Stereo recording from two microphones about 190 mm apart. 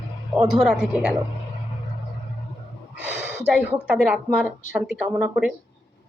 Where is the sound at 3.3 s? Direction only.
5° right (ahead or behind).